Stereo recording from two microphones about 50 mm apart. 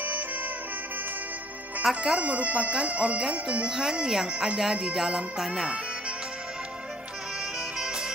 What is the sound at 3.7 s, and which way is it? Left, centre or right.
Speech, centre.